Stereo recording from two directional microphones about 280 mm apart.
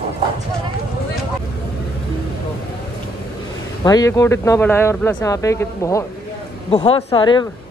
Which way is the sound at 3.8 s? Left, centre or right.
Centre.